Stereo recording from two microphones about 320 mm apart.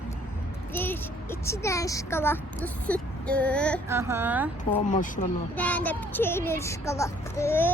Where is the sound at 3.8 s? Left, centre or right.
Centre.